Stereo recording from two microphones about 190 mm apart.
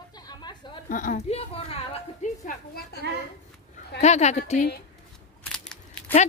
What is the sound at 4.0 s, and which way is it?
Speech, 35° left (ahead or behind).